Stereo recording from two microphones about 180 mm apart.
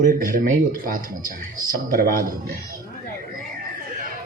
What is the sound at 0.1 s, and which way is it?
Speech, 50° right (ahead or behind).